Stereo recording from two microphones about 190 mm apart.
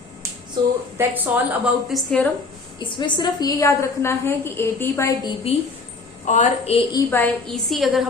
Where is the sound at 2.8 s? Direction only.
25° left (ahead or behind).